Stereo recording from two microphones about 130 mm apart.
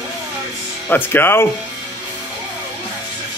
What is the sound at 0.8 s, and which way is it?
Speech, 15° left (ahead or behind).